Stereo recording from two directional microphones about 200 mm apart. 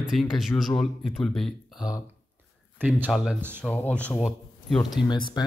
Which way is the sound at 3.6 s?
10° left (ahead or behind).